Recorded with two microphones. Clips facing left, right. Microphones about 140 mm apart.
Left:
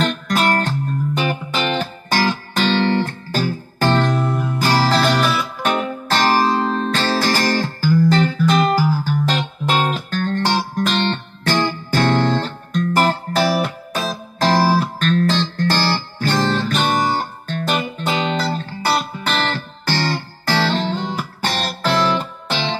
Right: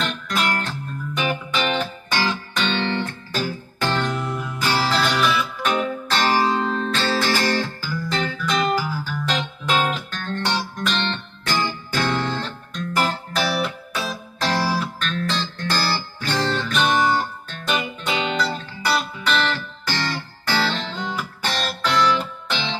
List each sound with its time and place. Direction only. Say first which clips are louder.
0.0 s music: left 6 dB; 40° left (ahead or behind)
20.4 s music: left 5 dB; 35° left (ahead or behind)